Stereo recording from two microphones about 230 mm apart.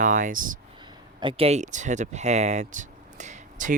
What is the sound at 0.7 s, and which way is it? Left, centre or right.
Speech, centre.